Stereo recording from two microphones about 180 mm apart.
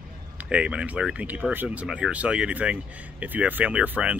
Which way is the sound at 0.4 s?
5° right (ahead or behind).